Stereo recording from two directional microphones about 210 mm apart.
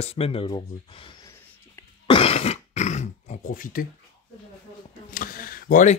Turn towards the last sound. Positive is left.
turn(degrees=40)  # may be behind; listen again after turning